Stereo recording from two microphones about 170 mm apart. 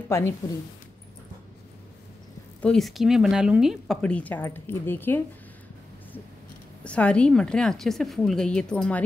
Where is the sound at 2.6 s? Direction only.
Centre (ahead or behind).